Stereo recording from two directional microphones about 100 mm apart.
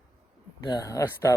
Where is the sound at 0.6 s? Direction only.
45° left (ahead or behind).